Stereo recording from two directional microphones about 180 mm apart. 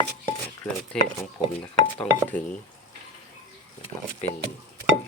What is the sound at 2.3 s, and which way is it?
Speech, 50° left (ahead or behind).